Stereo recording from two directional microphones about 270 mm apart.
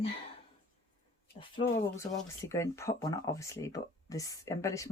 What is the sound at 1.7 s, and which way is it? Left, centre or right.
Speech, centre.